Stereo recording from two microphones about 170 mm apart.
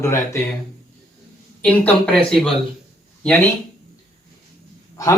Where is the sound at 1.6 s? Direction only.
5° left (ahead or behind).